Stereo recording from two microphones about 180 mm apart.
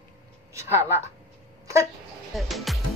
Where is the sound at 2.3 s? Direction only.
Centre (ahead or behind).